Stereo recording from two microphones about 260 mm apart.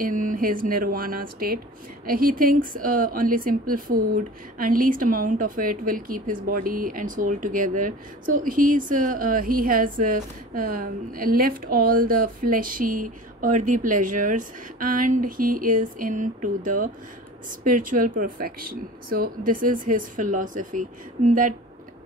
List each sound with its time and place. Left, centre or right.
0.0 s a woman's voice: right